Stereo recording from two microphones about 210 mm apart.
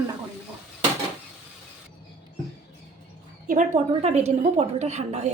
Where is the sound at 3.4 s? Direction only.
35° right (ahead or behind).